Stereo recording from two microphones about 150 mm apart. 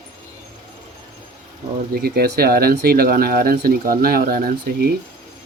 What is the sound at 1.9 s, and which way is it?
Speech, 90° right.